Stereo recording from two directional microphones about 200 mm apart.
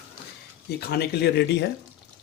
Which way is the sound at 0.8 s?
55° left (ahead or behind).